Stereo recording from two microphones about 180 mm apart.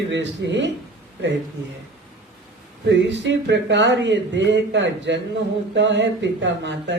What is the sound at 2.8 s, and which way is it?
A man's voice, 80° right.